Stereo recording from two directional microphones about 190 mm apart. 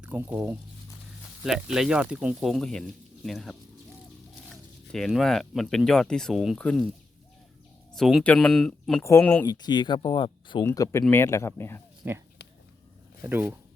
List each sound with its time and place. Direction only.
0.0 s speech: 10° right (ahead or behind)
4.9 s speech: centre (ahead or behind)
7.9 s speech: centre (ahead or behind)
9.5 s speech: 20° left (ahead or behind)
10.7 s speech: 15° left (ahead or behind)
12.0 s speech: 10° right (ahead or behind)
13.2 s speech: 10° right (ahead or behind)